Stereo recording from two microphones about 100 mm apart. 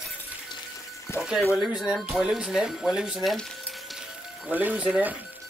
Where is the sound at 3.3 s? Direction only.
Centre (ahead or behind).